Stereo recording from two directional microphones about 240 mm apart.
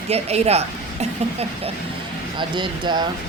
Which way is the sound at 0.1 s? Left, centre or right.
Right.